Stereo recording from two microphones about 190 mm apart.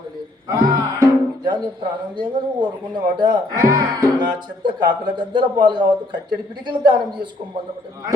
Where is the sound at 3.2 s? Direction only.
20° right (ahead or behind).